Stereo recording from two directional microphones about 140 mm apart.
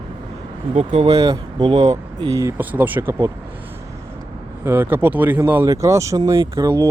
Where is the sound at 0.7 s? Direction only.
50° right (ahead or behind).